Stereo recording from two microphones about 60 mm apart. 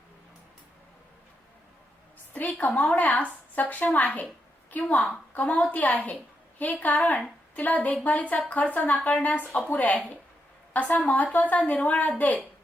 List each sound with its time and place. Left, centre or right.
2.3 s a woman's voice: left
4.9 s a woman's voice: centre
5.3 s a woman's voice: left